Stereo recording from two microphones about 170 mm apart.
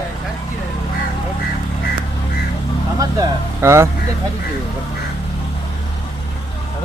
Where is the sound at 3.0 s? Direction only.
20° right (ahead or behind).